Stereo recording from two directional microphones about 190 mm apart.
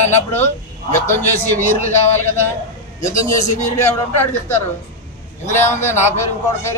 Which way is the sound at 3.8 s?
15° left (ahead or behind).